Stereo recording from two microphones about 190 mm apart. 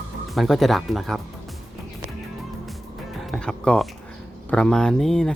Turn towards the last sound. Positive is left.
turn(degrees=5)  # may be behind; listen again after turning